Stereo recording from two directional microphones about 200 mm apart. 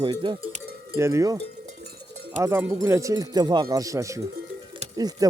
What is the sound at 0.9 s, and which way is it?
Speech, 15° right (ahead or behind).